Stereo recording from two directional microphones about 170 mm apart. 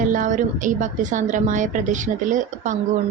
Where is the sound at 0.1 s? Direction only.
50° right (ahead or behind).